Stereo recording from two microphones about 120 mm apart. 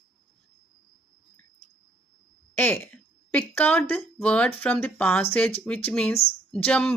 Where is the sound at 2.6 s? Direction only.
20° left (ahead or behind).